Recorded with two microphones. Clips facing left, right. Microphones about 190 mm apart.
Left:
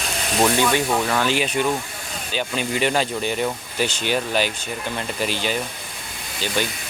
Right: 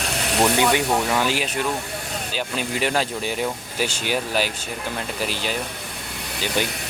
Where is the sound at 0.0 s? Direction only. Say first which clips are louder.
Even; 65° right (ahead or behind).